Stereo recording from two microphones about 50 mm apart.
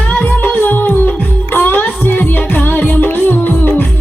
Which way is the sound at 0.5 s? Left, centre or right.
Left.